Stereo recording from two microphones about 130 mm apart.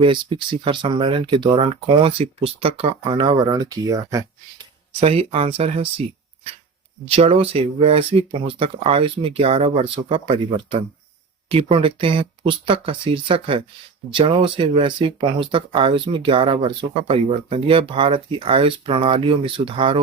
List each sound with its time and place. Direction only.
0.0 s speech: 40° right (ahead or behind)
4.9 s speech: 50° right (ahead or behind)
7.1 s speech: 50° right (ahead or behind)
11.4 s speech: 45° right (ahead or behind)